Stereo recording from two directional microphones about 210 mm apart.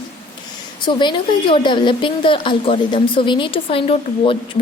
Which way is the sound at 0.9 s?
20° left (ahead or behind).